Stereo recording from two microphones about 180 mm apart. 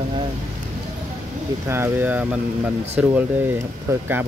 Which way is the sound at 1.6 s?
15° right (ahead or behind).